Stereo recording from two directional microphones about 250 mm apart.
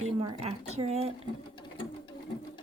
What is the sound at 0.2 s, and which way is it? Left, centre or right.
Speech, right.